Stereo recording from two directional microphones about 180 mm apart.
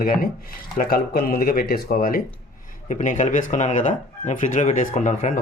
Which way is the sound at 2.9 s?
40° left (ahead or behind).